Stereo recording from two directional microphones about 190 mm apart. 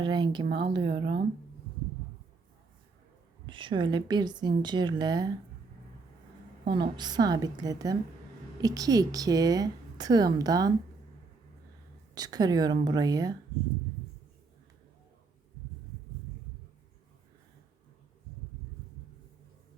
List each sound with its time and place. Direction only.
0.0 s speech: 25° right (ahead or behind)
3.4 s speech: 25° right (ahead or behind)
6.7 s speech: 25° right (ahead or behind)
12.1 s speech: 20° right (ahead or behind)